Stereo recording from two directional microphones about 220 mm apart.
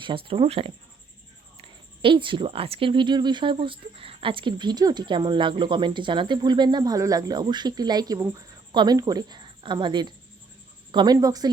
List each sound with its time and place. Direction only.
0.0 s a woman's voice: 25° right (ahead or behind)